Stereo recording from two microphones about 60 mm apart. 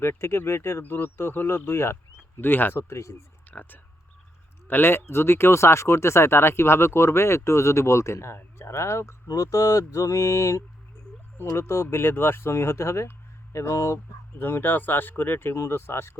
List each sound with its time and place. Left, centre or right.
0.0 s speech: left
2.9 s speech: left
3.5 s speech: left
9.2 s speech: left
11.3 s speech: left
14.3 s speech: left